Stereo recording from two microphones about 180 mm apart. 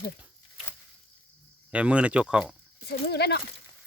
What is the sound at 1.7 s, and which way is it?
Speech, 5° right (ahead or behind).